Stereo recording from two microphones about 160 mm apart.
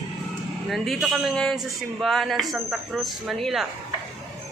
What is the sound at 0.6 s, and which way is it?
A man's voice, centre (ahead or behind).